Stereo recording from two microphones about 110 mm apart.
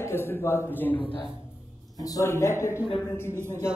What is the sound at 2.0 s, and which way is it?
Speech, 30° left (ahead or behind).